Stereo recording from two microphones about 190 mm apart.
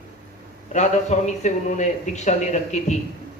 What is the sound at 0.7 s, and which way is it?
A man's voice, 40° left (ahead or behind).